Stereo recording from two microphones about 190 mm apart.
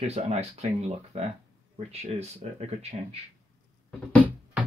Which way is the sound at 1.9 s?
35° right (ahead or behind).